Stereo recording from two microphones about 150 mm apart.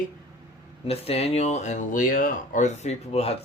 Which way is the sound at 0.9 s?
40° left (ahead or behind).